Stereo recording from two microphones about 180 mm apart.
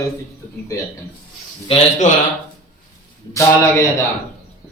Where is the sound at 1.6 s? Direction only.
35° left (ahead or behind).